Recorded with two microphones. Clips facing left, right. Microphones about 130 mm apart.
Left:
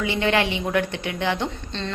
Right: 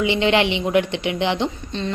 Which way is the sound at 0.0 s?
20° right (ahead or behind).